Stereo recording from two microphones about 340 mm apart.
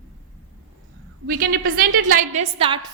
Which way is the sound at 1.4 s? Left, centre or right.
Right.